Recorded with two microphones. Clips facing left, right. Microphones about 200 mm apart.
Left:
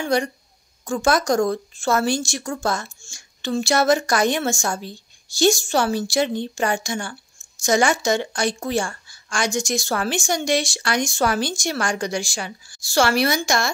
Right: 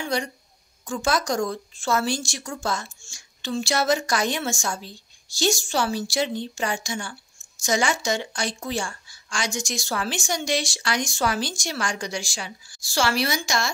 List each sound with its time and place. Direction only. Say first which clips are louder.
0.8 s a woman's voice: left 5 dB; 55° left (ahead or behind)